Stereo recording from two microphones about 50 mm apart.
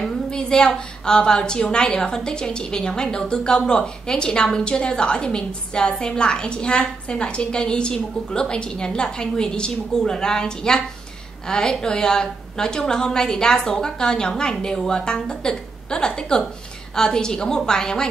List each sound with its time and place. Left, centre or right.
0.0 s a woman's voice: centre